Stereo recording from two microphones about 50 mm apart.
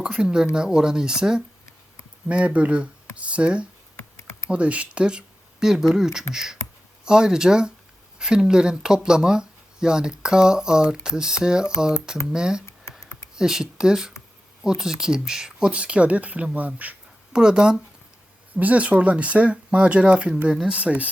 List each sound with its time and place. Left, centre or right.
0.0 s speech: centre
2.3 s speech: right
4.2 s typing: left
4.4 s speech: right
17.3 s speech: centre
18.5 s speech: right